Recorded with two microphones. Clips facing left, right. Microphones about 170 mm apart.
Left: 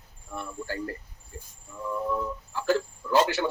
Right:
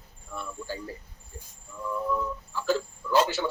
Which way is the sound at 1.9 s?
20° left (ahead or behind).